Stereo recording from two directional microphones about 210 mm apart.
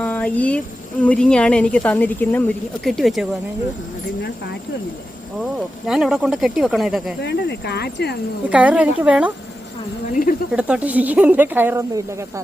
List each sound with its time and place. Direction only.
0.0 s a sound: 5° left (ahead or behind)
1.0 s speech: 5° left (ahead or behind)
5.8 s speech: centre (ahead or behind)
7.2 s speech: 55° left (ahead or behind)
8.4 s speech: 5° right (ahead or behind)
10.1 s speech: 40° left (ahead or behind)
10.5 s speech: 5° right (ahead or behind)